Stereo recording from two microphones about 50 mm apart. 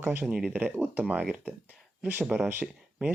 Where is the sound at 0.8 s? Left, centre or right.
Right.